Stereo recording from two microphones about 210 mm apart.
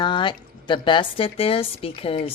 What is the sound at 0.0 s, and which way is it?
A woman's voice, 20° left (ahead or behind).